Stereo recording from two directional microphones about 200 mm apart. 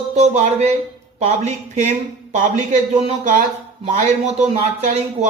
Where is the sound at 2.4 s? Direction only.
35° right (ahead or behind).